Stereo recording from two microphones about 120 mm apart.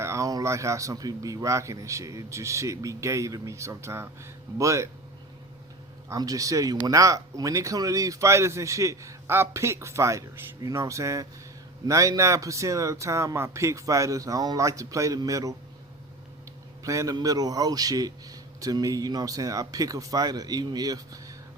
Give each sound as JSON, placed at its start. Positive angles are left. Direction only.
{"t": 0.0, "sound": "speech", "side_deg": -25}
{"t": 6.1, "sound": "speech", "side_deg": -30}
{"t": 16.8, "sound": "speech", "side_deg": -25}